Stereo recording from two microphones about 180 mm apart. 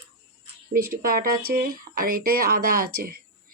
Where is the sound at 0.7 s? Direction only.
55° right (ahead or behind).